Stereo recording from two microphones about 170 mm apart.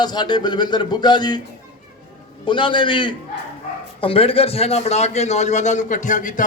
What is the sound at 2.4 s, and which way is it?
A man's voice, 30° left (ahead or behind).